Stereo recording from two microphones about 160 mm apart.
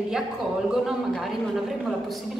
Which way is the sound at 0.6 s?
Centre (ahead or behind).